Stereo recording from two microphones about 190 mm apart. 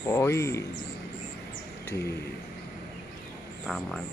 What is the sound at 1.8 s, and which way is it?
Speech, 15° left (ahead or behind).